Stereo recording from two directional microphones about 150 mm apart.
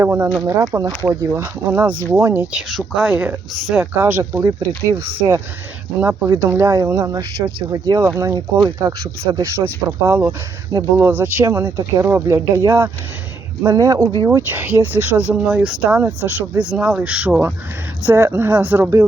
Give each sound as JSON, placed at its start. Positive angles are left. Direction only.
{"t": 0.0, "sound": "speech", "side_deg": -15}